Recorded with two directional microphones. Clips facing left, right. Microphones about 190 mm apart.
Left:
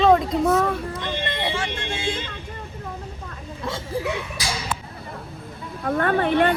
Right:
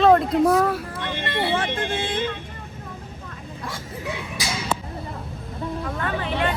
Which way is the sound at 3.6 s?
25° left (ahead or behind).